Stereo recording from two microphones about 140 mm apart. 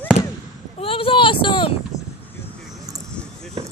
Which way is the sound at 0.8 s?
40° left (ahead or behind).